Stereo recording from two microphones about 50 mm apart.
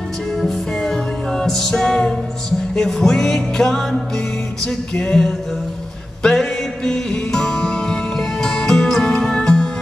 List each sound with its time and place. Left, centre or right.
0.4 s music: centre
4.6 s music: centre
6.2 s music: centre